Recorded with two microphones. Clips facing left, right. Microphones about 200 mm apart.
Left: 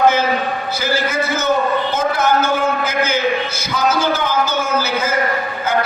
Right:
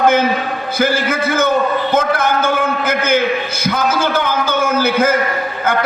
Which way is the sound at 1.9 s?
55° right (ahead or behind).